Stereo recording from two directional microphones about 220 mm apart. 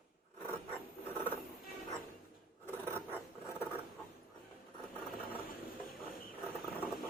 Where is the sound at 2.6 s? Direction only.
10° left (ahead or behind).